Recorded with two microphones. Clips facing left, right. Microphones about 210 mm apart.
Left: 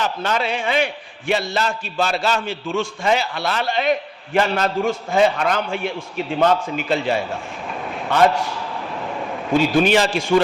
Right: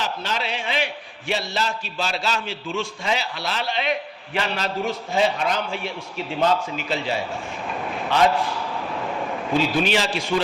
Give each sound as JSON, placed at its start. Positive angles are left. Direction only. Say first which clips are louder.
{"t": 0.0, "sound": "a man's voice", "louder": "left 5 dB", "side_deg": 50}
{"t": 9.7, "sound": "a man's voice", "louder": "left 6 dB", "side_deg": 50}